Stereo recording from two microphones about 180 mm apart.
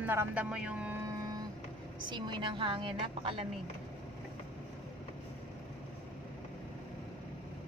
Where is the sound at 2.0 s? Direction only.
25° right (ahead or behind).